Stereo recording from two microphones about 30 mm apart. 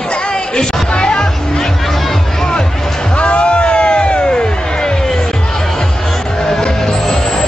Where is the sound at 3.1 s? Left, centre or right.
Left.